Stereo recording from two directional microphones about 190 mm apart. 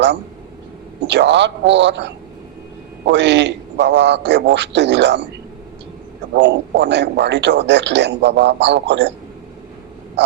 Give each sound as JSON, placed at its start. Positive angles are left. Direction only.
{"t": 1.0, "sound": "a man's voice", "side_deg": -65}
{"t": 6.3, "sound": "a man's voice", "side_deg": -65}